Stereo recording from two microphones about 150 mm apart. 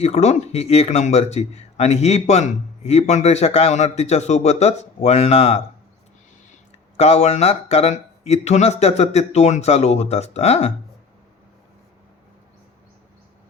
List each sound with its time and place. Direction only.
0.0 s speech: 45° left (ahead or behind)
6.9 s speech: 45° left (ahead or behind)